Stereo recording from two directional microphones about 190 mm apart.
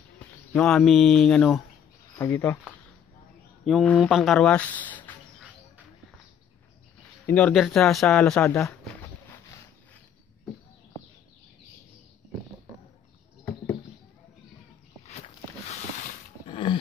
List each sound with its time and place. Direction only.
0.5 s speech: 5° left (ahead or behind)
2.1 s speech: 15° left (ahead or behind)
3.6 s speech: centre (ahead or behind)
7.2 s speech: 5° left (ahead or behind)
8.4 s speech: 15° left (ahead or behind)
15.7 s a sound: 35° left (ahead or behind)